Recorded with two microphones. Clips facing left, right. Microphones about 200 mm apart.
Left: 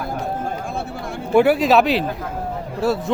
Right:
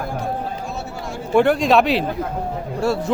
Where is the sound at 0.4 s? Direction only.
55° left (ahead or behind).